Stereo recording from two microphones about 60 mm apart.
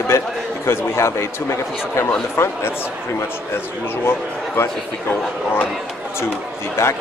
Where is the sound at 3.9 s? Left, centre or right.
Left.